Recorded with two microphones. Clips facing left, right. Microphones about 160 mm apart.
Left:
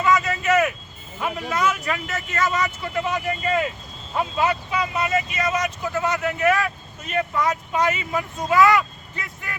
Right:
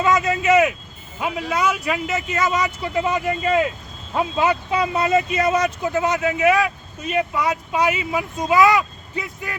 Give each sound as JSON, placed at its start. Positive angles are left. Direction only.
{"t": 0.0, "sound": "vehicle", "side_deg": -20}
{"t": 1.2, "sound": "speech", "side_deg": -10}
{"t": 4.4, "sound": "speech", "side_deg": -25}